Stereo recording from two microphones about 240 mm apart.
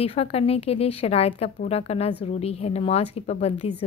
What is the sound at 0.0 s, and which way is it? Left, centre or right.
Speech, left.